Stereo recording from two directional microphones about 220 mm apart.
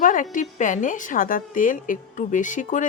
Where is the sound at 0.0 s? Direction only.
35° left (ahead or behind).